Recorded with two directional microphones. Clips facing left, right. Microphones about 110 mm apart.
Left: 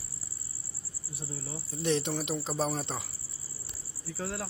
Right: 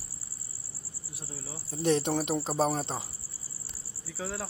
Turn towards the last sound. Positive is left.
turn(degrees=0)  # may be behind; listen again after turning